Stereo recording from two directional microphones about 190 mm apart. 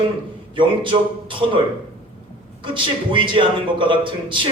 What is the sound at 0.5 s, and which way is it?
Speech, 25° right (ahead or behind).